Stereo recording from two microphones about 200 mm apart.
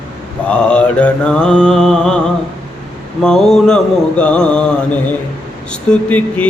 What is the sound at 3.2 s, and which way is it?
Mantra, centre (ahead or behind).